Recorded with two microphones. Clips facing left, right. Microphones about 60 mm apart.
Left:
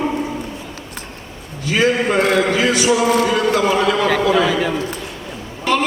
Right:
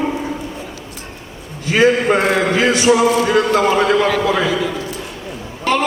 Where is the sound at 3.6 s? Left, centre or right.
Right.